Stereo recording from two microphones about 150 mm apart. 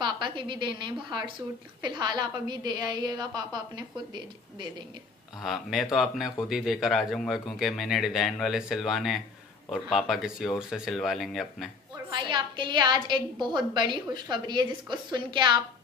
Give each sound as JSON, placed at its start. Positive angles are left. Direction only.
{"t": 0.0, "sound": "a woman's voice", "side_deg": -30}
{"t": 5.4, "sound": "speech", "side_deg": 0}
{"t": 12.1, "sound": "a woman's voice", "side_deg": -30}